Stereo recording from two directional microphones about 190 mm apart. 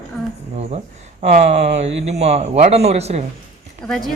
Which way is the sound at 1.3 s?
40° right (ahead or behind).